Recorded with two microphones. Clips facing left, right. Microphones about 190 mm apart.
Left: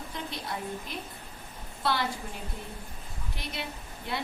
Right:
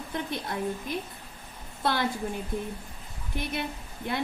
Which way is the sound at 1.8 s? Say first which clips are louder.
Right 2 dB; 50° right (ahead or behind).